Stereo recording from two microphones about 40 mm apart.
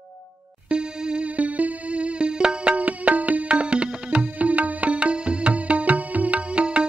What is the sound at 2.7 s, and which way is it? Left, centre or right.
Music, right.